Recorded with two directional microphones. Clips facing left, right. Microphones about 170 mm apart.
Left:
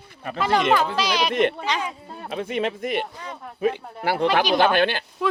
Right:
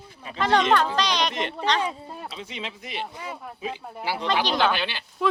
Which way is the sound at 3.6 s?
60° left (ahead or behind).